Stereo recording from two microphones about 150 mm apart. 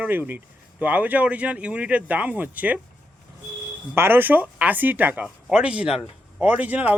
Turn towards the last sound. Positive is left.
turn(degrees=-10)  # may be behind; listen again after turning